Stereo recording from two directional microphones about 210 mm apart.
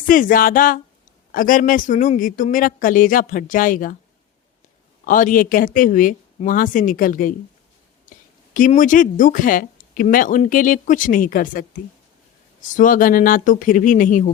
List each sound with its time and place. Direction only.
0.1 s speech: 40° left (ahead or behind)
5.0 s speech: 40° left (ahead or behind)
8.5 s speech: 40° left (ahead or behind)
12.7 s speech: 40° left (ahead or behind)